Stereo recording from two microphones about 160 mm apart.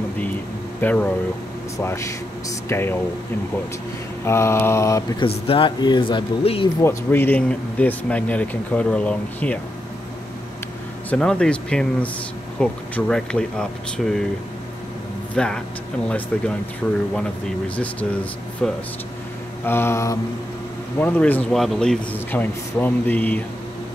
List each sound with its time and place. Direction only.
0.7 s speech: 10° left (ahead or behind)
4.2 s speech: 15° left (ahead or behind)
5.2 s speech: 35° left (ahead or behind)
6.8 s speech: 15° left (ahead or behind)
11.1 s speech: 5° left (ahead or behind)
15.3 s speech: 5° left (ahead or behind)
16.8 s speech: 5° left (ahead or behind)
18.6 s speech: 5° left (ahead or behind)
19.6 s speech: 15° left (ahead or behind)